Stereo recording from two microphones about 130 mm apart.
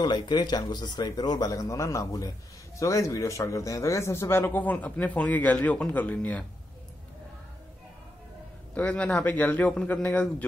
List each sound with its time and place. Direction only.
0.0 s speech: 35° left (ahead or behind); by 6.4 s 10° left (ahead or behind)
8.7 s speech: 10° left (ahead or behind)